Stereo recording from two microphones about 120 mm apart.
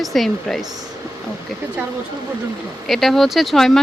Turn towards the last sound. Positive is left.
turn(degrees=5)  # may be behind; listen again after turning